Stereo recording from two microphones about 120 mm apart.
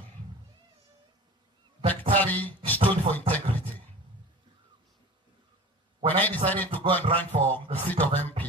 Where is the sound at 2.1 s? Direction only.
15° left (ahead or behind).